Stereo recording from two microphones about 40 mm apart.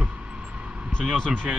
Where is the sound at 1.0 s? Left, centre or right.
Centre.